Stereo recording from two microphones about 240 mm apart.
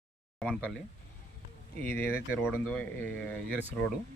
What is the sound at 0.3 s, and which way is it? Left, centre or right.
Speech, centre.